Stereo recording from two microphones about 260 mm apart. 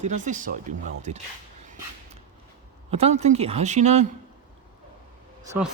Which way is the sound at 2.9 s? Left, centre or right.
Right.